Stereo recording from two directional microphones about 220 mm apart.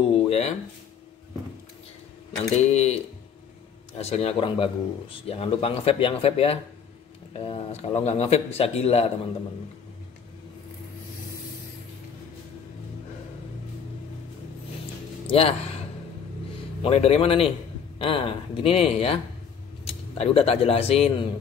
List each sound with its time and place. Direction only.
0.0 s a sound: 25° left (ahead or behind)
2.5 s speech: 30° left (ahead or behind)
4.0 s speech: 30° left (ahead or behind)
15.2 s speech: 25° left (ahead or behind)
16.8 s speech: 30° left (ahead or behind)